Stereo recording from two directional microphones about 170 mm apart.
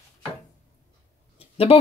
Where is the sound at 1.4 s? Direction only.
35° left (ahead or behind).